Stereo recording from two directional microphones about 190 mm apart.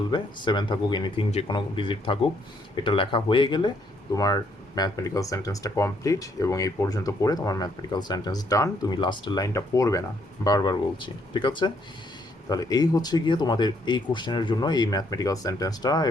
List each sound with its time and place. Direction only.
0.1 s speech: 25° left (ahead or behind)